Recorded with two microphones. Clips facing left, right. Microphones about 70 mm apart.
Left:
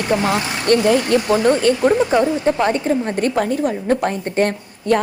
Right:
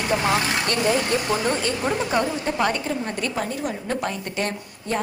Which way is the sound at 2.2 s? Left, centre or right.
Left.